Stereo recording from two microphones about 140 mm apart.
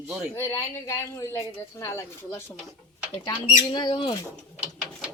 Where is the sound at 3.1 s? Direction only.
30° left (ahead or behind).